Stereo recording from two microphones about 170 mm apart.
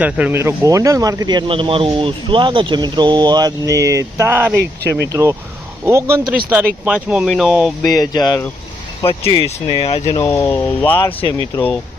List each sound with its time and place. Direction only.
0.0 s speech: 10° right (ahead or behind)
4.5 s speech: 75° right (ahead or behind)
5.0 s speech: 20° right (ahead or behind)
6.8 s speech: 5° right (ahead or behind)
7.8 s speech: 20° left (ahead or behind)
9.3 s speech: 35° left (ahead or behind)
10.2 s speech: 15° left (ahead or behind)
10.9 s speech: 30° left (ahead or behind)